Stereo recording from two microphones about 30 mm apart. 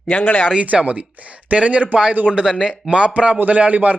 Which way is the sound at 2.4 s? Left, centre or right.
Centre.